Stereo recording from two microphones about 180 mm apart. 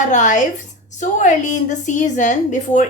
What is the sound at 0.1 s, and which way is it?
A woman's voice, 40° left (ahead or behind).